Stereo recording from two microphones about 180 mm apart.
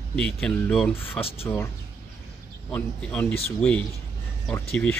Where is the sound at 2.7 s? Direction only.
10° left (ahead or behind).